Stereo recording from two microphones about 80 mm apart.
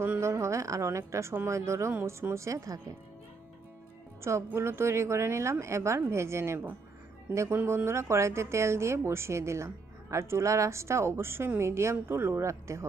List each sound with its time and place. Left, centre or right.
0.0 s a woman's voice: right
4.2 s a woman's voice: right